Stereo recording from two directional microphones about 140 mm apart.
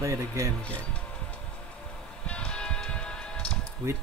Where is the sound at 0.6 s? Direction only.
10° left (ahead or behind).